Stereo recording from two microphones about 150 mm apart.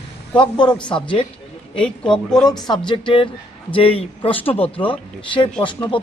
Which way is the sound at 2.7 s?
35° left (ahead or behind).